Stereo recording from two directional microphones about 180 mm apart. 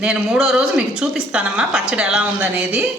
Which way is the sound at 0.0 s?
5° right (ahead or behind).